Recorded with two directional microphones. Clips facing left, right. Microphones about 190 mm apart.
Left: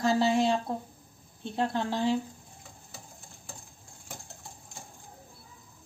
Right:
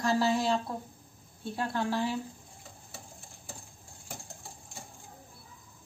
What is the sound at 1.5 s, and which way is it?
Speech, 25° left (ahead or behind).